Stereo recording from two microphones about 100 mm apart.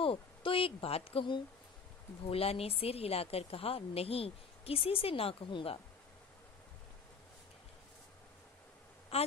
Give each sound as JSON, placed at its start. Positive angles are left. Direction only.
{"t": 0.0, "sound": "speech", "side_deg": 60}
{"t": 2.2, "sound": "a woman's voice", "side_deg": 80}
{"t": 9.1, "sound": "a woman's voice", "side_deg": 90}